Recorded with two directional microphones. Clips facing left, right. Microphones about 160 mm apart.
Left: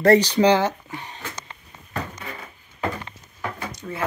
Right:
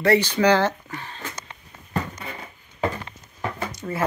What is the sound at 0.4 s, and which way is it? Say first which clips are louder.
Speech: left 1 dB; 20° left (ahead or behind).